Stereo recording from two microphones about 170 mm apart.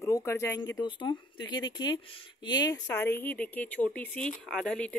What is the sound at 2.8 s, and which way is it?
Speech, 10° left (ahead or behind).